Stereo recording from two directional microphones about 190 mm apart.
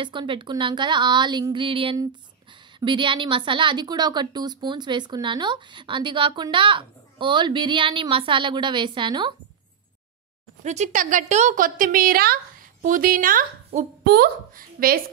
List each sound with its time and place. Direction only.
0.0 s a woman's voice: 25° right (ahead or behind)
10.6 s a woman's voice: 35° right (ahead or behind); by 14.3 s 55° right (ahead or behind)